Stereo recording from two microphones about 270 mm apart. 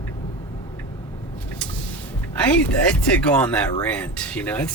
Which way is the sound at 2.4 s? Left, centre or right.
Centre.